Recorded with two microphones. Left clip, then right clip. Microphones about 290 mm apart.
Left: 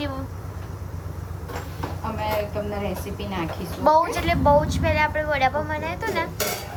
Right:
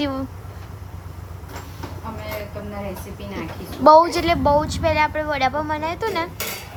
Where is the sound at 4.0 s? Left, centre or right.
Centre.